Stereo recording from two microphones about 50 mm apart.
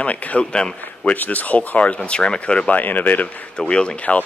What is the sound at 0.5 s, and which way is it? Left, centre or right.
Speech, centre.